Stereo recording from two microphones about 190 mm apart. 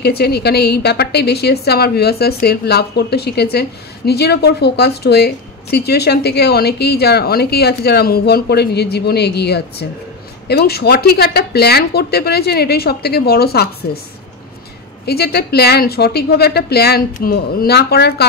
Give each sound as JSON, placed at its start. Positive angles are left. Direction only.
{"t": 0.0, "sound": "a woman's voice", "side_deg": 55}
{"t": 15.0, "sound": "a woman's voice", "side_deg": 55}